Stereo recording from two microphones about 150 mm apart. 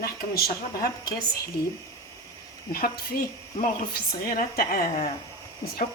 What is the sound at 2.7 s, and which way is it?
Speech, 90° left.